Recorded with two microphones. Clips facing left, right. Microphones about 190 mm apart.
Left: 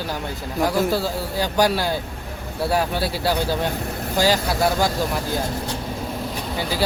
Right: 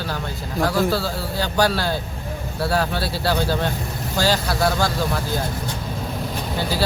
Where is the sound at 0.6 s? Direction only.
15° left (ahead or behind).